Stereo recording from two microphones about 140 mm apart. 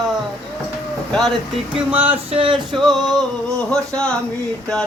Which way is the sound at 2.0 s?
40° right (ahead or behind).